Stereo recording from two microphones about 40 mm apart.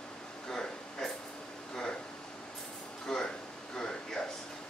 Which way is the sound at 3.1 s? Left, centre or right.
Centre.